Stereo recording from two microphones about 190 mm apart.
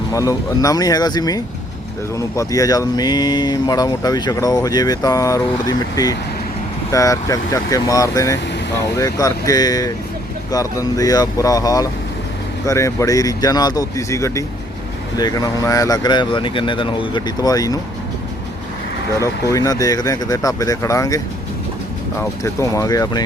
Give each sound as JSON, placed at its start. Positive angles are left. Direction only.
{"t": 0.1, "sound": "speech", "side_deg": 20}
{"t": 19.2, "sound": "speech", "side_deg": 15}
{"t": 22.2, "sound": "speech", "side_deg": 15}